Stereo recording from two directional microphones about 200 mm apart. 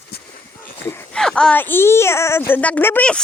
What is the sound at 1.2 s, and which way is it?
Speech, 5° left (ahead or behind).